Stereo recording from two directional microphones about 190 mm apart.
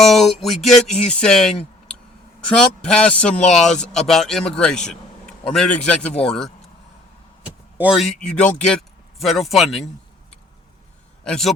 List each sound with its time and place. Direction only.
0.0 s speech: centre (ahead or behind)
2.5 s speech: 5° left (ahead or behind)
7.8 s speech: 5° right (ahead or behind)
11.2 s a man's voice: 5° left (ahead or behind)